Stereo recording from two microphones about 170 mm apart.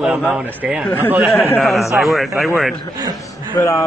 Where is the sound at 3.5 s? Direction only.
15° left (ahead or behind).